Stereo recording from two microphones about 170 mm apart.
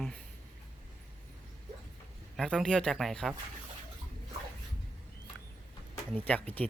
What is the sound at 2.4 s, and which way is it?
Speech, 5° left (ahead or behind).